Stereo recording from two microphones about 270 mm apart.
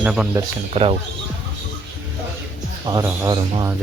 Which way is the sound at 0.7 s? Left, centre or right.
Right.